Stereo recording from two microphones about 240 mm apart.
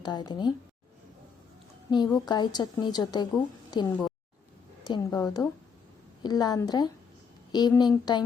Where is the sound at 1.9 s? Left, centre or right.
Centre.